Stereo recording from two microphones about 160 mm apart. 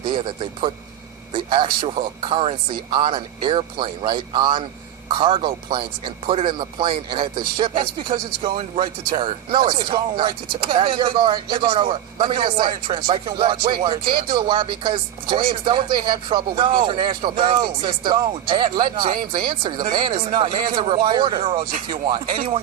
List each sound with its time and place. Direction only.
0.0 s a man's voice: 30° right (ahead or behind)